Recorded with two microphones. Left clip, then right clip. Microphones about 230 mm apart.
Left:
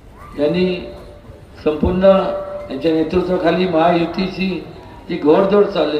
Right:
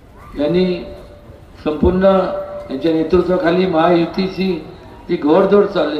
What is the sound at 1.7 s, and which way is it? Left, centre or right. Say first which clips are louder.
A man's voice: left 1 dB; right.